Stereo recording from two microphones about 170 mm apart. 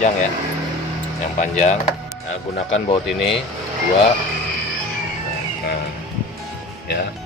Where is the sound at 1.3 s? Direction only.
45° left (ahead or behind).